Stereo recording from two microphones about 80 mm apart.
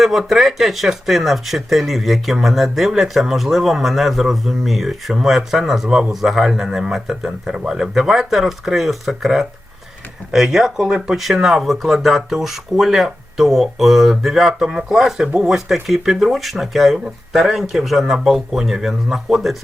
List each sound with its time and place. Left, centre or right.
0.0 s speech: centre